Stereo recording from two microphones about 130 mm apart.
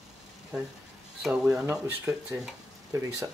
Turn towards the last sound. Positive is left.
turn(degrees=-25)  # may be behind; listen again after turning